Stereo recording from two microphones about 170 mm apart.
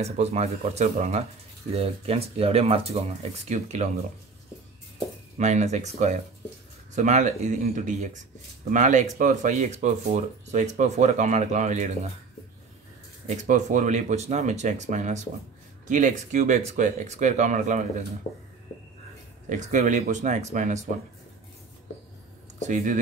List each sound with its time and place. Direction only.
0.0 s speech: 40° right (ahead or behind)
5.4 s speech: 45° right (ahead or behind)
13.3 s speech: 45° right (ahead or behind)
19.5 s speech: 50° right (ahead or behind)
22.6 s speech: 45° right (ahead or behind)